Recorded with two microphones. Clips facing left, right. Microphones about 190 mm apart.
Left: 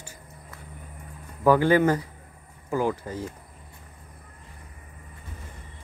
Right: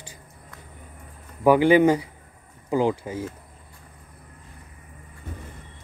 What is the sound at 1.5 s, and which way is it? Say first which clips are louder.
Speech: right 3 dB; 15° right (ahead or behind).